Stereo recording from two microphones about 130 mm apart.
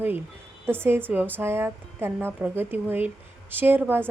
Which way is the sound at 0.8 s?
15° right (ahead or behind).